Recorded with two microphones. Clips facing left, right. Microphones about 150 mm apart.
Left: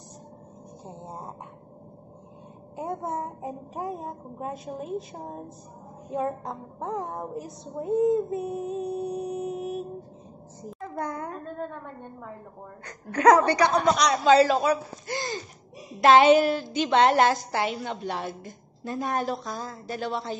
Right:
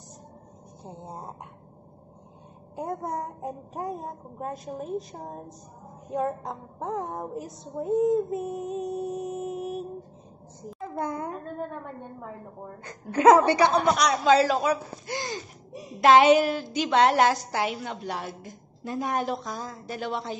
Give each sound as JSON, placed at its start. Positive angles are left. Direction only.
{"t": 1.0, "sound": "a woman's voice", "side_deg": 0}
{"t": 2.7, "sound": "a woman's voice", "side_deg": 0}
{"t": 11.1, "sound": "a woman's voice", "side_deg": -20}
{"t": 13.7, "sound": "a woman's voice", "side_deg": -5}